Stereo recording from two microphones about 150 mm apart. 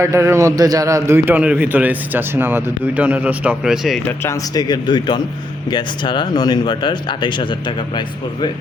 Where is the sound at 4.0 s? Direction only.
15° left (ahead or behind).